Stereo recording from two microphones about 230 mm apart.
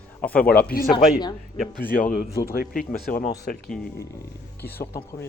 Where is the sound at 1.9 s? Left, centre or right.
Left.